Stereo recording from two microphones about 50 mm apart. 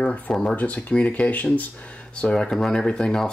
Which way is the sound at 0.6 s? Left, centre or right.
Left.